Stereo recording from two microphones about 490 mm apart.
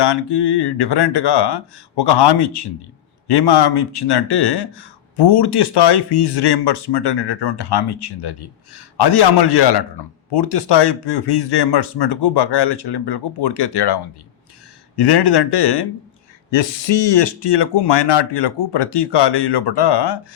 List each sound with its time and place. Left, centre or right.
0.0 s speech: left
16.5 s speech: left